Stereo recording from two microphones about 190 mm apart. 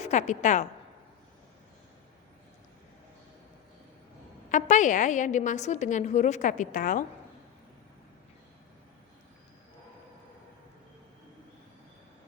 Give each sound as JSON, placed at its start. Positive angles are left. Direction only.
{"t": 0.0, "sound": "a woman's voice", "side_deg": 40}
{"t": 4.5, "sound": "a woman's voice", "side_deg": 40}